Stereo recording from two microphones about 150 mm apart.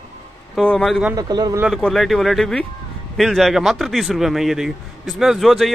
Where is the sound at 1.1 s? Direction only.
25° right (ahead or behind).